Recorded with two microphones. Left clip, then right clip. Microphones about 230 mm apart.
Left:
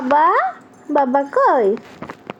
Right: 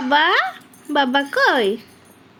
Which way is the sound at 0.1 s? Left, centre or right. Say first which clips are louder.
Left 2 dB; right.